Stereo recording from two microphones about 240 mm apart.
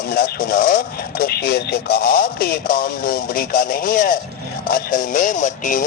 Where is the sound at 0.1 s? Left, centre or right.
Left.